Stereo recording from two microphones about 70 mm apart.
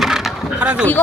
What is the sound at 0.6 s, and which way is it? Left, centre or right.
Speech, centre.